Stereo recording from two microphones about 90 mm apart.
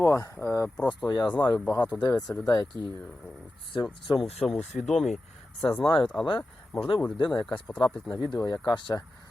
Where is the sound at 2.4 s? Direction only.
45° left (ahead or behind).